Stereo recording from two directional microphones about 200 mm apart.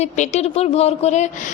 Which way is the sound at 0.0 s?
35° left (ahead or behind).